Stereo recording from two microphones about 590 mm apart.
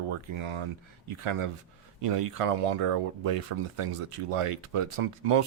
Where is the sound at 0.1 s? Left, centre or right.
Right.